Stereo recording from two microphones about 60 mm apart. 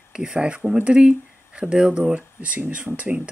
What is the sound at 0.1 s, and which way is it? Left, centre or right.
Speech, centre.